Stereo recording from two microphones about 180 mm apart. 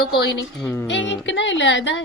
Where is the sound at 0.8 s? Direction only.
90° left.